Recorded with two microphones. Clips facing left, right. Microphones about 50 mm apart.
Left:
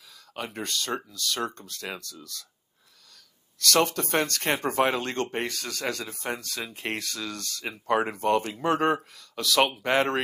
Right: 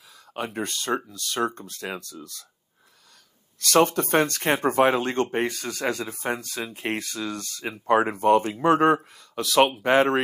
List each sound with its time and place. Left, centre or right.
0.3 s speech: centre
3.7 s speech: centre